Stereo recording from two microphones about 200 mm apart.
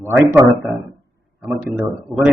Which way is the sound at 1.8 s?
Centre (ahead or behind).